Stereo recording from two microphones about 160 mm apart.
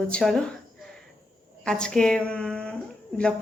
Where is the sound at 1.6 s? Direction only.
5° left (ahead or behind).